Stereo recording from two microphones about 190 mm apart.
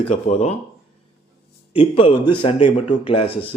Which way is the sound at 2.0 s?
25° left (ahead or behind).